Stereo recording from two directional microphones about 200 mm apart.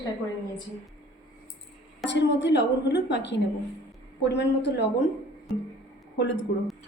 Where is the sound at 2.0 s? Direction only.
60° left (ahead or behind).